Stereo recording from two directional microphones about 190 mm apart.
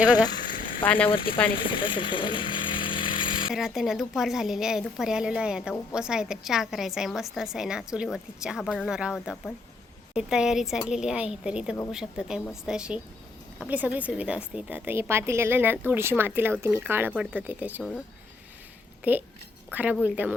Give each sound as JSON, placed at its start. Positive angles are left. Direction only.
{"t": 0.9, "sound": "speech", "side_deg": 10}
{"t": 1.5, "sound": "chainsaw", "side_deg": 25}
{"t": 3.5, "sound": "a woman's voice", "side_deg": 0}
{"t": 10.2, "sound": "a woman's voice", "side_deg": -5}
{"t": 19.0, "sound": "a woman's voice", "side_deg": -10}